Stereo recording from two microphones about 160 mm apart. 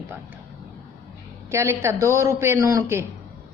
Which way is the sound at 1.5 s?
15° right (ahead or behind).